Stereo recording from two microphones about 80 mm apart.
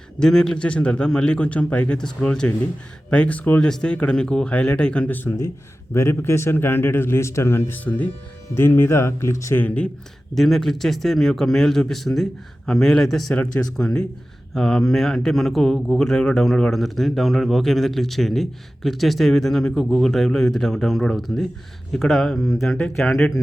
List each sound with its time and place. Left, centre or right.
0.2 s speech: centre
3.6 s speech: centre
5.9 s a man's voice: left
9.6 s speech: centre
10.3 s speech: centre
13.3 s speech: centre